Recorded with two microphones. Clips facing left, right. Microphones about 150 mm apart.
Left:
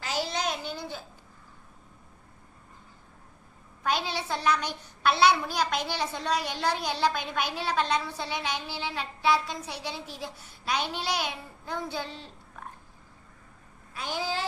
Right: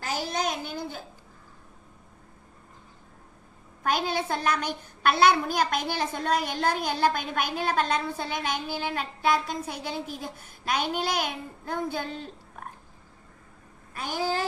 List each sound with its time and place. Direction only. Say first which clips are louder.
0.0 s a sound: right 1 dB; 45° right (ahead or behind)
3.8 s a child's voice: right 3 dB; 50° right (ahead or behind)
13.9 s a child's voice: right 3 dB; 50° right (ahead or behind)